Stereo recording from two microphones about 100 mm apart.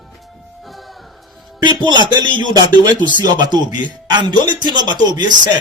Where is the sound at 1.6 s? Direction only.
50° right (ahead or behind).